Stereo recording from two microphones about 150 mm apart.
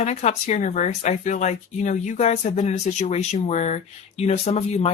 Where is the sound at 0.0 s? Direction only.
50° left (ahead or behind).